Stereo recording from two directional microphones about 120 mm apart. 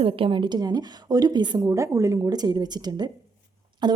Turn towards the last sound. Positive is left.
turn(degrees=-40)  # may be behind; listen again after turning